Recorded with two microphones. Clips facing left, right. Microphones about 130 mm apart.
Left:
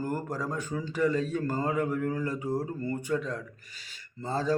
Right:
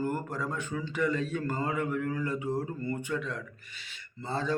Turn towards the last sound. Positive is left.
turn(degrees=40)  # may be behind; listen again after turning